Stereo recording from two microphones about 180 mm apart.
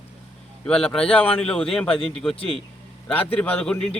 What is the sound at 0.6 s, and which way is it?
A man's voice, 5° left (ahead or behind).